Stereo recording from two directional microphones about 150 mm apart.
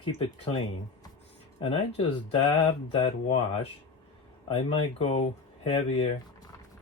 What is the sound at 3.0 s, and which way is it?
Speech, 45° left (ahead or behind).